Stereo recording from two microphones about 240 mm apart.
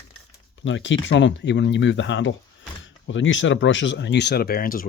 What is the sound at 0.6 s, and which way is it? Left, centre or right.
Speech, left.